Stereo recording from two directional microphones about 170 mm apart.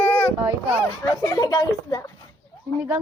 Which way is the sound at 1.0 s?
25° left (ahead or behind).